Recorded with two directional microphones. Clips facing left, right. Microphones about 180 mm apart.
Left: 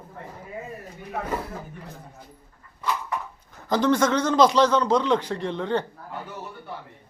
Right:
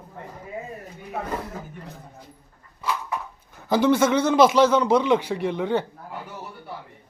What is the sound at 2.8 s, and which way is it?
Speech, 5° right (ahead or behind).